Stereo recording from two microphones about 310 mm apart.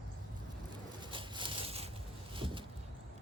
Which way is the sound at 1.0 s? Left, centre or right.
Centre.